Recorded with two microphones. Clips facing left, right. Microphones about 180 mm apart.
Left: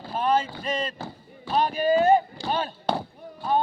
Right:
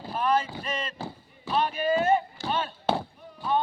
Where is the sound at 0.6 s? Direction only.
35° left (ahead or behind).